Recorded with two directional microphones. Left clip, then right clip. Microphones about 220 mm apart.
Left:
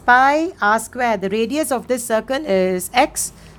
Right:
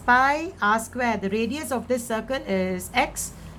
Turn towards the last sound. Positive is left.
turn(degrees=40)  # may be behind; listen again after turning